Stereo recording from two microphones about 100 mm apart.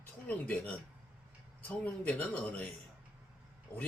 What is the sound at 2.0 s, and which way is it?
Speech, 15° left (ahead or behind).